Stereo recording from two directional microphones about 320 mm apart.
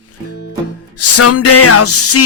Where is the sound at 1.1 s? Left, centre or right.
Left.